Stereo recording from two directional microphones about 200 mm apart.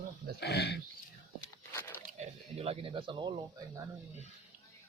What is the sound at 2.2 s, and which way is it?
Speech, 30° right (ahead or behind).